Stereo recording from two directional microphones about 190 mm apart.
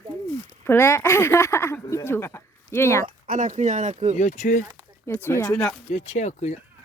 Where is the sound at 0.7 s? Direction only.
10° left (ahead or behind).